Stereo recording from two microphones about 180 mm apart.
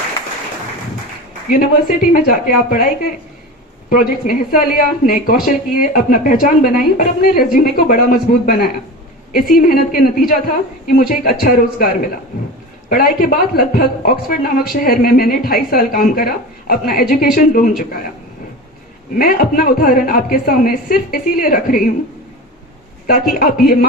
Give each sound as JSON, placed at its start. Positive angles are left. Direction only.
{"t": 1.5, "sound": "a woman's voice", "side_deg": 55}
{"t": 12.9, "sound": "speech", "side_deg": 55}
{"t": 19.2, "sound": "a woman's voice", "side_deg": 50}
{"t": 23.4, "sound": "speech", "side_deg": 55}